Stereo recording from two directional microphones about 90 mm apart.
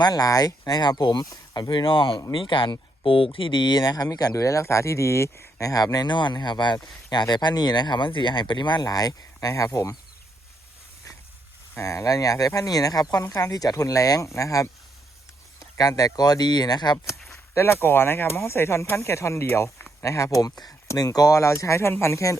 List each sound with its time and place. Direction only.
0.0 s speech: 45° left (ahead or behind)
1.7 s speech: 70° left (ahead or behind)
3.3 s speech: 60° left (ahead or behind)
8.8 s speech: 45° left (ahead or behind)
11.8 s speech: 35° left (ahead or behind)
15.8 s speech: 40° left (ahead or behind)
17.5 s speech: 30° left (ahead or behind)